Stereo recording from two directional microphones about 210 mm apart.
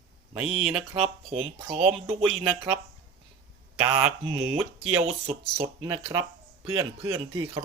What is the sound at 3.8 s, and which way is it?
Speech, 10° right (ahead or behind).